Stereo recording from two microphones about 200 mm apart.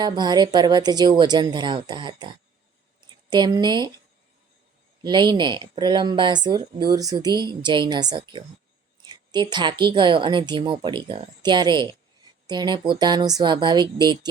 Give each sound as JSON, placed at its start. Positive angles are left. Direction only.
{"t": 0.0, "sound": "speech", "side_deg": -20}
{"t": 3.2, "sound": "speech", "side_deg": -20}
{"t": 5.0, "sound": "speech", "side_deg": -20}
{"t": 9.0, "sound": "a sound", "side_deg": -20}
{"t": 9.8, "sound": "speech", "side_deg": -25}